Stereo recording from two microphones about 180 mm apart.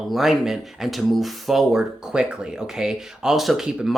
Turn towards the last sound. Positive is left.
turn(degrees=0)  # may be behind; listen again after turning